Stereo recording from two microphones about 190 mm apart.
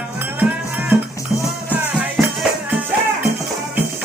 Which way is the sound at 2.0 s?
Centre (ahead or behind).